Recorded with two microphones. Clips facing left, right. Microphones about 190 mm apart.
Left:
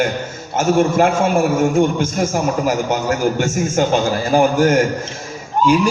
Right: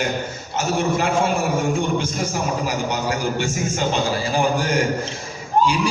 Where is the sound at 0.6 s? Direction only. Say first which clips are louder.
Left 7 dB; 50° left (ahead or behind).